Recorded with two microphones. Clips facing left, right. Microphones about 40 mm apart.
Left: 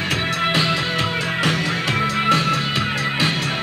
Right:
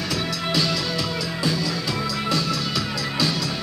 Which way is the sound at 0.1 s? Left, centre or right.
Left.